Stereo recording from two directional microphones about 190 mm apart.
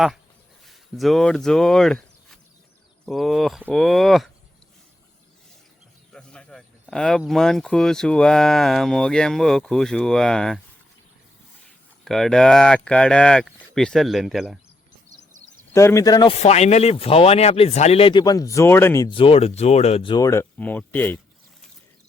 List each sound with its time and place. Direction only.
0.7 s speech: centre (ahead or behind)
6.1 s a sound: 5° left (ahead or behind)
7.2 s speech: centre (ahead or behind)
12.0 s speech: centre (ahead or behind)
15.7 s speech: 15° left (ahead or behind)
19.0 s speech: 30° left (ahead or behind); by 21.2 s 10° left (ahead or behind)